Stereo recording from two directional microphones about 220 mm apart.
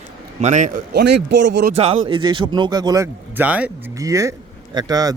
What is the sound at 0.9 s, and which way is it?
Speech, 50° right (ahead or behind).